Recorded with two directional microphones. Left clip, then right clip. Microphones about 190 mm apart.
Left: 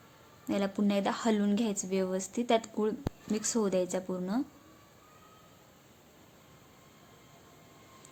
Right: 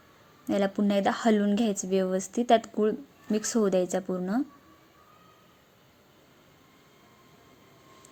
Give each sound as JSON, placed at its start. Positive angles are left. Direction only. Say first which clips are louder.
{"t": 0.4, "sound": "a woman's voice", "louder": "right 5 dB", "side_deg": -15}